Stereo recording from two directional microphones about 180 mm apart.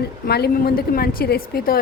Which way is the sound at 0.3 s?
60° left (ahead or behind).